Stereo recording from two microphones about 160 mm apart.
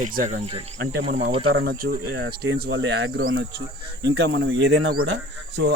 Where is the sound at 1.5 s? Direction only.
70° right (ahead or behind); by 3.2 s 90° right.